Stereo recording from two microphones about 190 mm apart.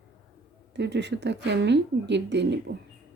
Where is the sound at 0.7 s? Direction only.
65° right (ahead or behind).